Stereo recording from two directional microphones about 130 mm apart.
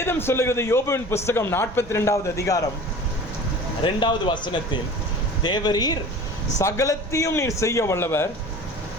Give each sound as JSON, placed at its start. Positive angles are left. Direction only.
{"t": 0.0, "sound": "a man's voice", "side_deg": 15}
{"t": 4.0, "sound": "a man's voice", "side_deg": 35}